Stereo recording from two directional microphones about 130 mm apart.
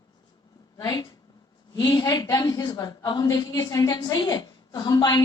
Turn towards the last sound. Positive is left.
turn(degrees=35)  # may be behind; listen again after turning